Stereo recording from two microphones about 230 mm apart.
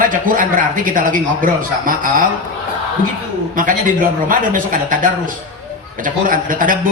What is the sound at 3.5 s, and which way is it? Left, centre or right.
A man's voice, right.